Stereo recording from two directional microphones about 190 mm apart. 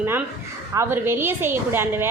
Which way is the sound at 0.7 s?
15° right (ahead or behind).